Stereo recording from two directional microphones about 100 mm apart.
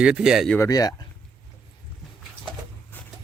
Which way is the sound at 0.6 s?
40° left (ahead or behind).